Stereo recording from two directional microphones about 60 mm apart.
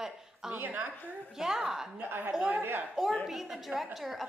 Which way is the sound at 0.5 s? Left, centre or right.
Right.